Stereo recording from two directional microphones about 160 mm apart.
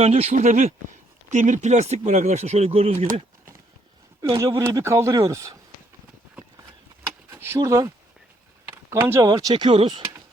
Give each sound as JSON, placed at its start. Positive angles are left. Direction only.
{"t": 0.0, "sound": "speech", "side_deg": -40}
{"t": 4.2, "sound": "a man's voice", "side_deg": -20}
{"t": 7.3, "sound": "a man's voice", "side_deg": -15}